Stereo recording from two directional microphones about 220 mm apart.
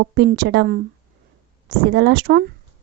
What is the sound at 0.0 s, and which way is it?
Speech, 50° right (ahead or behind).